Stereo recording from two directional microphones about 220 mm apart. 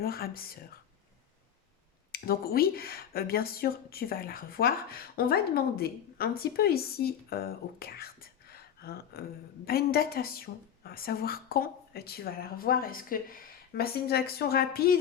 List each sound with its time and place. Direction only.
0.0 s speech: 45° left (ahead or behind)
2.1 s speech: 45° left (ahead or behind)